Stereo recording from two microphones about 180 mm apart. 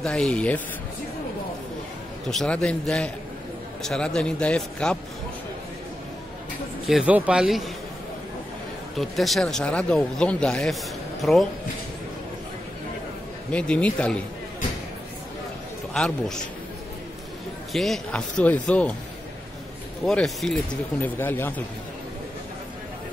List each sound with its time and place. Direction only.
0.0 s a man's voice: 5° left (ahead or behind)
2.2 s a man's voice: 5° left (ahead or behind)
6.9 s a man's voice: 5° right (ahead or behind)
8.9 s a man's voice: centre (ahead or behind)
13.5 s speech: 5° left (ahead or behind)
15.9 s a man's voice: 5° left (ahead or behind)
17.7 s speech: centre (ahead or behind)
20.1 s a man's voice: centre (ahead or behind)